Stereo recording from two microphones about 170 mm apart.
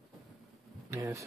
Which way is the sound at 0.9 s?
20° right (ahead or behind).